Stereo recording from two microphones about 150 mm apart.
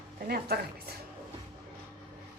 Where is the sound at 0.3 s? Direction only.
90° right.